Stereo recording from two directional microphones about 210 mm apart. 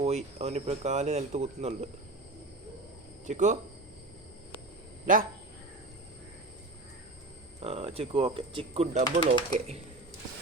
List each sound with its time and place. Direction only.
0.0 s speech: 30° right (ahead or behind)
3.2 s speech: 35° right (ahead or behind)
7.6 s speech: 30° right (ahead or behind)